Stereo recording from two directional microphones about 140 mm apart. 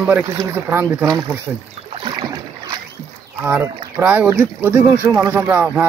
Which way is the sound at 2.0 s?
30° right (ahead or behind).